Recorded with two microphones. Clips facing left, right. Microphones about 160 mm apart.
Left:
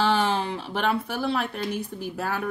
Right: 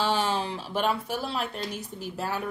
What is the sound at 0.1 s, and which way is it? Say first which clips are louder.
Speech: left 3 dB; 55° left (ahead or behind).